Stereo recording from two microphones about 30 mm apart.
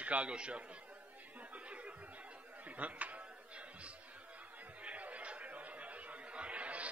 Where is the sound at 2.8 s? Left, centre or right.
Right.